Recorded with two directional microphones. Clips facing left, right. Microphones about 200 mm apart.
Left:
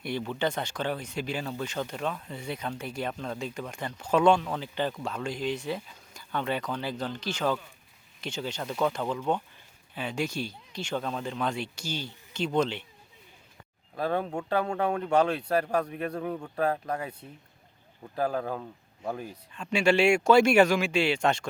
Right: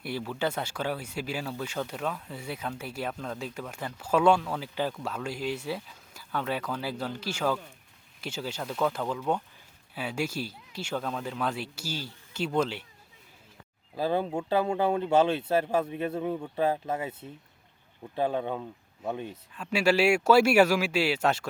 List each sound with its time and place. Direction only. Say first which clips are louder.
0.0 s speech: left 1 dB; 5° right (ahead or behind)
14.0 s speech: right 1 dB; 30° right (ahead or behind)
16.7 s speech: right 1 dB; 5° right (ahead or behind)
18.3 s speech: right 1 dB; centre (ahead or behind)